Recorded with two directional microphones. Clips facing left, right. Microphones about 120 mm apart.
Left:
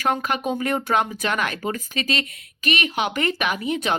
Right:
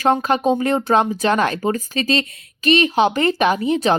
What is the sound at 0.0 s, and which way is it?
A woman's voice, 30° right (ahead or behind).